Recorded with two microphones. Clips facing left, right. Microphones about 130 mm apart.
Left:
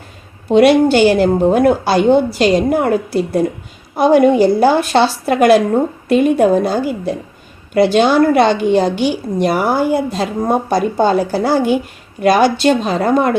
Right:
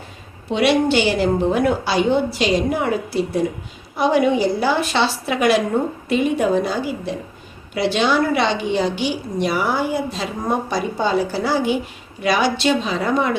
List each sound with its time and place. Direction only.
0.5 s a woman's voice: 50° left (ahead or behind)